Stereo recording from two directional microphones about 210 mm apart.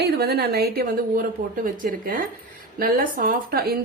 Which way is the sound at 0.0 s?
50° right (ahead or behind).